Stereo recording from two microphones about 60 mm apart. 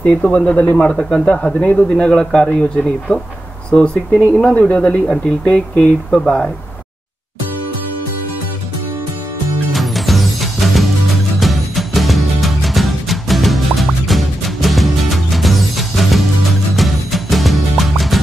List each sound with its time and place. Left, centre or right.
0.0 s speech: left
9.7 s music: centre